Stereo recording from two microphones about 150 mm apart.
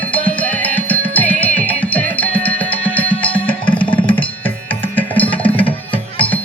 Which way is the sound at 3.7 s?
35° left (ahead or behind).